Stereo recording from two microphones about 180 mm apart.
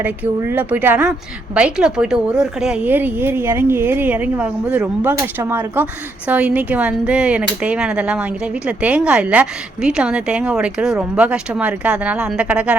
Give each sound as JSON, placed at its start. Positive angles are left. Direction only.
{"t": 0.0, "sound": "a woman's voice", "side_deg": -10}